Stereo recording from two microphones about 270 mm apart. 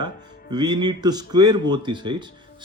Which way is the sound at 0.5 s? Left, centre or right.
Centre.